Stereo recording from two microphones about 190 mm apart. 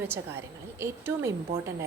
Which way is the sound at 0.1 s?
15° right (ahead or behind).